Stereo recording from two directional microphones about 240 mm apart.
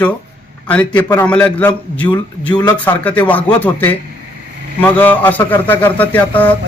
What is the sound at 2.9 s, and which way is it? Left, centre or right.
A man's voice, centre.